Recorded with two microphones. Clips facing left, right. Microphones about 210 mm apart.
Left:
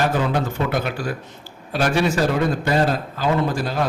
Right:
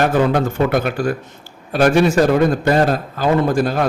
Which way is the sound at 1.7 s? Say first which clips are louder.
Right 6 dB; 50° right (ahead or behind).